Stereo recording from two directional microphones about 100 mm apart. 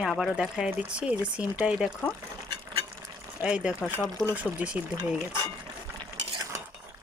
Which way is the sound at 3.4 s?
10° right (ahead or behind).